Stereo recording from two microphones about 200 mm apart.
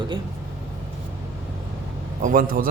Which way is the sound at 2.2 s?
45° right (ahead or behind).